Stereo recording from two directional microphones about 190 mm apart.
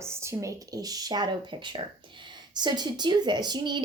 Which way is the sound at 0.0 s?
15° right (ahead or behind).